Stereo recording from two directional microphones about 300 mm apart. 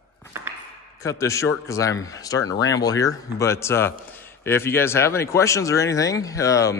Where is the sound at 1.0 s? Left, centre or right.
Centre.